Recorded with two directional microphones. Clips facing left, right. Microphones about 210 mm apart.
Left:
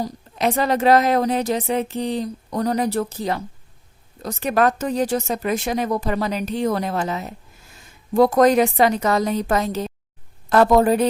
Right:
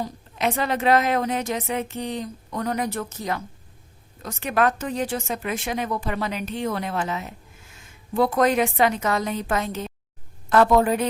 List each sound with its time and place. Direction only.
0.0 s a woman's voice: 35° left (ahead or behind)